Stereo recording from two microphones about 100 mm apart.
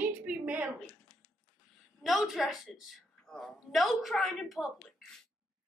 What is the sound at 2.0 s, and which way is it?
A woman's voice, centre (ahead or behind).